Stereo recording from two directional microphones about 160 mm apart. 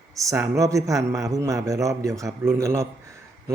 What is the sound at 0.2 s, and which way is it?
A man's voice, 20° right (ahead or behind).